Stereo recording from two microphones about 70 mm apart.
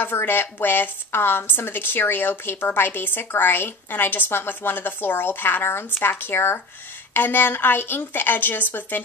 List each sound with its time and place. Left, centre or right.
0.0 s a woman's voice: left